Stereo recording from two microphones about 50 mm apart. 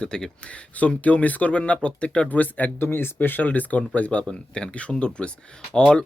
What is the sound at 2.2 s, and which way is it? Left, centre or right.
Speech, left.